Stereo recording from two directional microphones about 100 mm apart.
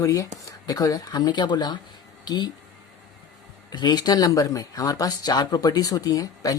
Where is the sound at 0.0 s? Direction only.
35° left (ahead or behind).